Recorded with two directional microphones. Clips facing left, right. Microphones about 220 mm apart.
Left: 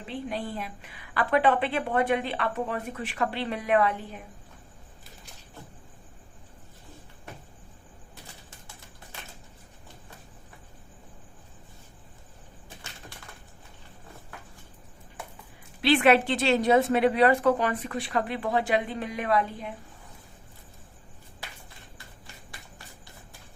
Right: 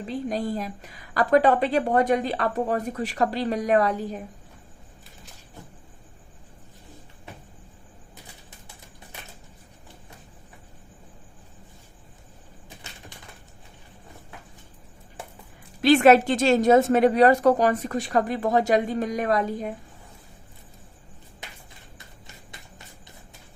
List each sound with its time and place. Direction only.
0.1 s a woman's voice: 40° right (ahead or behind)
15.8 s a woman's voice: 45° right (ahead or behind)
21.4 s a sound: 20° right (ahead or behind)